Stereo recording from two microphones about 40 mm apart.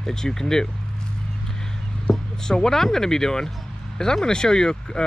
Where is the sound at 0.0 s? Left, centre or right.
Centre.